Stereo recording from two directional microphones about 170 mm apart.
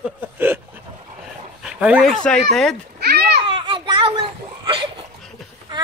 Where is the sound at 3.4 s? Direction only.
30° right (ahead or behind).